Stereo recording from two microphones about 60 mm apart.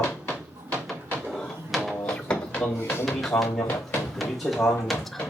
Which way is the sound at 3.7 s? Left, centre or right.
Left.